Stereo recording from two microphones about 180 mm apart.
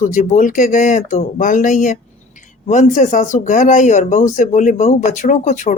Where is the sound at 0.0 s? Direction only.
45° left (ahead or behind).